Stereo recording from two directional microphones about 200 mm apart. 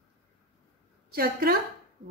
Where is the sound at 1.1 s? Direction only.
50° right (ahead or behind).